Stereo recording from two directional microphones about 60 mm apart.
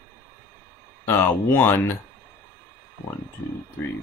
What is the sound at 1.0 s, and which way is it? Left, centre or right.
Speech, left.